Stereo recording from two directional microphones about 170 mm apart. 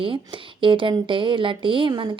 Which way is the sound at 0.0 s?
30° right (ahead or behind).